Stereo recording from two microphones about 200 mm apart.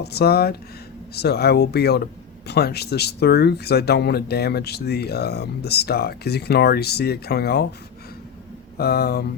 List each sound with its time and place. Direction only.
0.0 s speech: 55° left (ahead or behind)
8.8 s speech: 50° left (ahead or behind)